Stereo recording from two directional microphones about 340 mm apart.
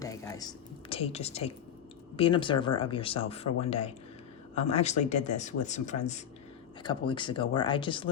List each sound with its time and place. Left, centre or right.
0.0 s speech: centre